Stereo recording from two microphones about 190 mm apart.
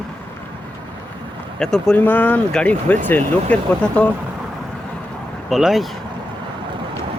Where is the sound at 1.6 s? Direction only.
5° left (ahead or behind).